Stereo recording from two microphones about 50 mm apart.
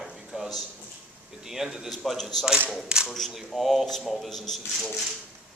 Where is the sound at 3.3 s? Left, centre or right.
Centre.